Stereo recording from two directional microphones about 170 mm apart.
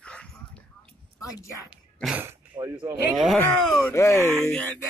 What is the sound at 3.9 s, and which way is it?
Speech, 15° left (ahead or behind).